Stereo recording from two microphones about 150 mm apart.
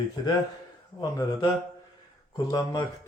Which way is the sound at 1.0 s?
25° left (ahead or behind).